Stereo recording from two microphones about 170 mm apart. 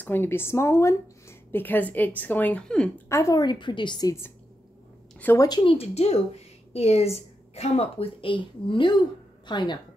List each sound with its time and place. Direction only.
0.0 s a woman's voice: 15° left (ahead or behind)
3.1 s a woman's voice: 15° left (ahead or behind)
5.5 s a woman's voice: 30° left (ahead or behind)